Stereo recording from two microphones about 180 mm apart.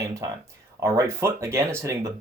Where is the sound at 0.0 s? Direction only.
15° right (ahead or behind).